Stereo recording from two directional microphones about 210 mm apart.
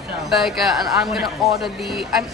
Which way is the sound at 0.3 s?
Centre (ahead or behind).